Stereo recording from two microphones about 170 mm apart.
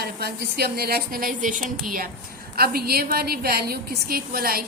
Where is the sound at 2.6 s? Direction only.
65° right (ahead or behind).